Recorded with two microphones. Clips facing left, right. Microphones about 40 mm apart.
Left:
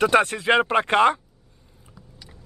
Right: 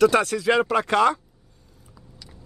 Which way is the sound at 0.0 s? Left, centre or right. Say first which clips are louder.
Right 1 dB; left.